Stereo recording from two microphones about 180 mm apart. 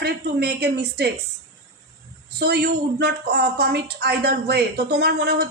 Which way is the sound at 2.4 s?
65° right (ahead or behind).